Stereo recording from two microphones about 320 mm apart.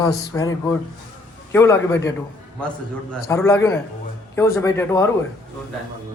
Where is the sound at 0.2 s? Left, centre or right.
Centre.